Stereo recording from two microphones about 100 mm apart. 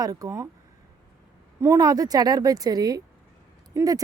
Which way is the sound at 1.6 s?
35° right (ahead or behind).